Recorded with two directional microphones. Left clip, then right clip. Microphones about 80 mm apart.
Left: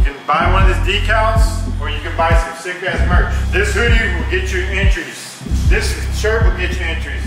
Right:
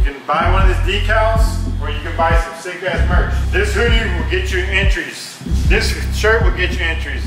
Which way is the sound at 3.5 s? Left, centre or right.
Centre.